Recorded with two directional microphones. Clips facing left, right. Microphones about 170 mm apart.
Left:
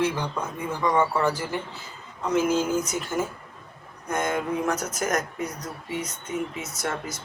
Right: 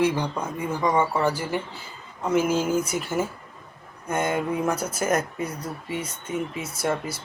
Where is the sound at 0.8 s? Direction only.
10° right (ahead or behind).